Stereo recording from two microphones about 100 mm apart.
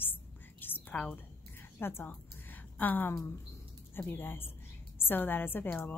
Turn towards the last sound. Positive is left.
turn(degrees=20)  # may be behind; listen again after turning